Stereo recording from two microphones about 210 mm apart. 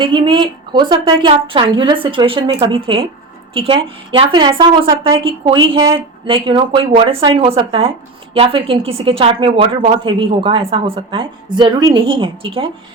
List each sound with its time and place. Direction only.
0.0 s a woman's voice: 20° right (ahead or behind)